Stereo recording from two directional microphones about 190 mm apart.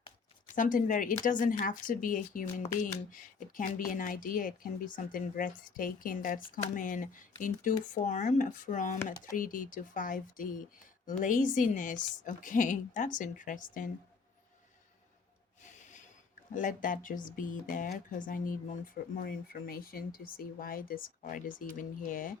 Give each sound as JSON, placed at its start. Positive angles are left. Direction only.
{"t": 0.5, "sound": "speech", "side_deg": 45}
{"t": 15.6, "sound": "snort", "side_deg": 40}
{"t": 16.6, "sound": "speech", "side_deg": 45}